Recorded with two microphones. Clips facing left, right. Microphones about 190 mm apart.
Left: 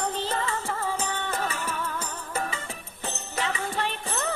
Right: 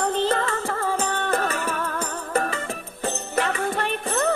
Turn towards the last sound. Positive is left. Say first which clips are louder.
# right 7 dB
turn(degrees=-55)  # may be behind; listen again after turning